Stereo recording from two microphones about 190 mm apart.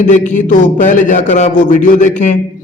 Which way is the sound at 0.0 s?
40° left (ahead or behind).